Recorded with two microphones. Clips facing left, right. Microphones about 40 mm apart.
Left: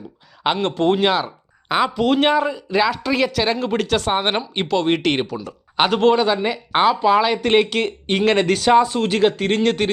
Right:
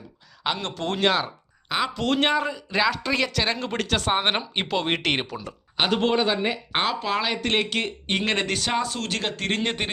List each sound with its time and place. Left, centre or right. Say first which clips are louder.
0.4 s speech: left 9 dB; left
0.9 s speech: left 4 dB; centre
7.6 s speech: left 6 dB; centre
8.8 s speech: left 11 dB; centre
9.6 s speech: left 8 dB; centre